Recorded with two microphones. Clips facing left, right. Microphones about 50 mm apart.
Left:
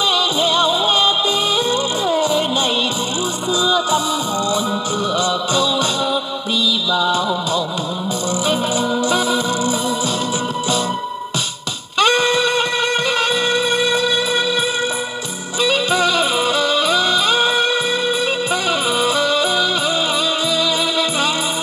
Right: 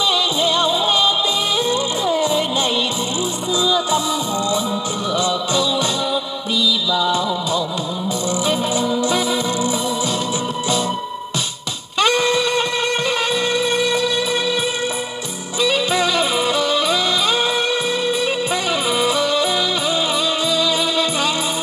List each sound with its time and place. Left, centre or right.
0.1 s music: left
3.6 s music: left
5.1 s music: left
6.9 s music: left
12.0 s a sound: left
13.3 s music: left
15.6 s music: left